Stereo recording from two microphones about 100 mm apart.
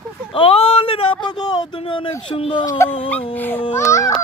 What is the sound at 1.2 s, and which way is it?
Speech, 45° left (ahead or behind).